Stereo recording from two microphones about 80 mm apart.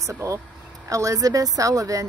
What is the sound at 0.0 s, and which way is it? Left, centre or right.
Speech, right.